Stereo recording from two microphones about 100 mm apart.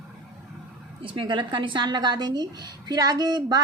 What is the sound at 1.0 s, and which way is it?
A woman's voice, 60° right (ahead or behind).